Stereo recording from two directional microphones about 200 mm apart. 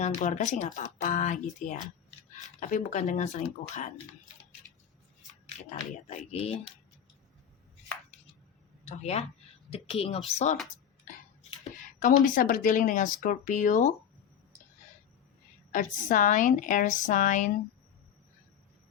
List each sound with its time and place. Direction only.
0.0 s speech: 40° left (ahead or behind)
6.1 s a woman's voice: 30° left (ahead or behind)
8.8 s a woman's voice: 35° left (ahead or behind)
15.7 s speech: 40° left (ahead or behind)